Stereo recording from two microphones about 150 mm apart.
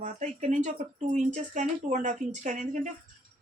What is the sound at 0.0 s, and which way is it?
Speech, 55° right (ahead or behind).